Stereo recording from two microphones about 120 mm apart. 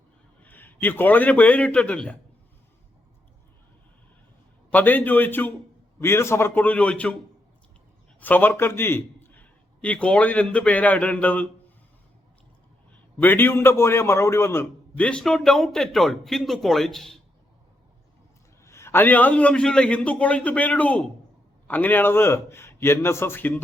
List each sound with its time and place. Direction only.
0.4 s a man's voice: 15° left (ahead or behind)
4.7 s a man's voice: 15° left (ahead or behind)
8.2 s a man's voice: 15° left (ahead or behind)
12.9 s a man's voice: 15° left (ahead or behind)
18.6 s a man's voice: 25° left (ahead or behind)